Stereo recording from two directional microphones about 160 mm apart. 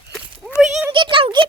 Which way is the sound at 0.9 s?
30° right (ahead or behind).